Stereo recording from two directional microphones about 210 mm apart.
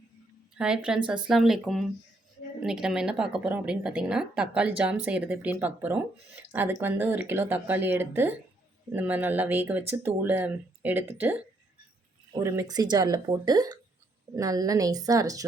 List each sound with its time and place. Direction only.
0.5 s speech: 5° right (ahead or behind)